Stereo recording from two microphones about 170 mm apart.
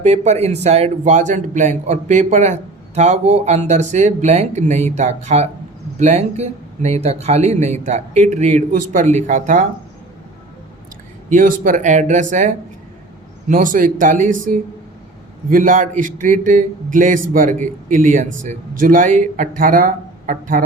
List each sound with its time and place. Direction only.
0.0 s a man's voice: 40° right (ahead or behind)
11.3 s a man's voice: 50° right (ahead or behind)